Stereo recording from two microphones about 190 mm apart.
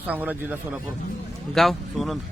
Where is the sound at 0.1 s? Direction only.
10° right (ahead or behind).